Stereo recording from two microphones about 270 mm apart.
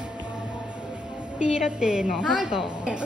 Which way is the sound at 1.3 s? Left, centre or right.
Centre.